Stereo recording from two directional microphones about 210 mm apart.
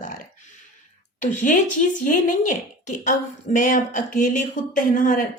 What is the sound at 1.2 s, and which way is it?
Speech, 35° left (ahead or behind).